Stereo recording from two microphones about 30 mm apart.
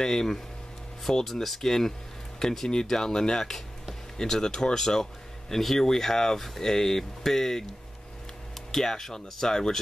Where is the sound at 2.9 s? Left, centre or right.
Centre.